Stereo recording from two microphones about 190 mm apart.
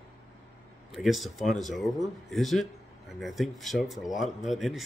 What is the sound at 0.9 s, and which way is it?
A man's voice, centre (ahead or behind).